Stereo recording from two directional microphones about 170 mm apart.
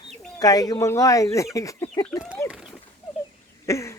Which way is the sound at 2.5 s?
5° right (ahead or behind).